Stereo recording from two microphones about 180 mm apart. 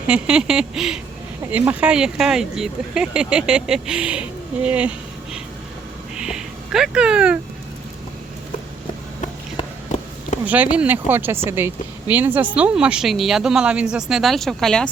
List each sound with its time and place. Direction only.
0.1 s speech: 5° right (ahead or behind)
9.6 s run: 40° left (ahead or behind)
10.4 s speech: 10° right (ahead or behind)